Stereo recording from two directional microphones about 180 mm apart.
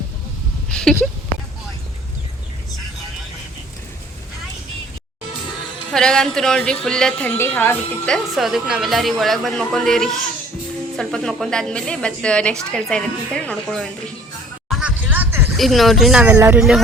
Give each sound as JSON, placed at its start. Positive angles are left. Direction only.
{"t": 0.7, "sound": "speech", "side_deg": 5}
{"t": 5.9, "sound": "a woman's voice", "side_deg": 5}
{"t": 14.7, "sound": "music", "side_deg": -5}
{"t": 15.5, "sound": "a woman's voice", "side_deg": 0}